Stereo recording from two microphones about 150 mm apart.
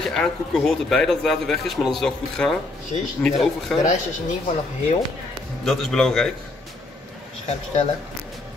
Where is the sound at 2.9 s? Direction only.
45° left (ahead or behind).